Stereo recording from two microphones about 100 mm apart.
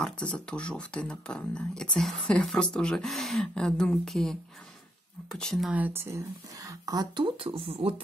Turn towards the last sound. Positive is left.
turn(degrees=-70)  # may be behind; listen again after turning